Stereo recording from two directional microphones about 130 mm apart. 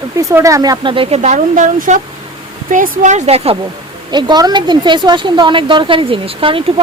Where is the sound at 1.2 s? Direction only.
70° right (ahead or behind).